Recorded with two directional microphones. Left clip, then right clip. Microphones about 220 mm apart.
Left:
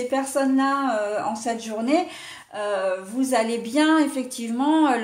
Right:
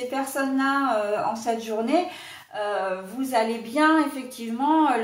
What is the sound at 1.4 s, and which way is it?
Speech, 45° left (ahead or behind).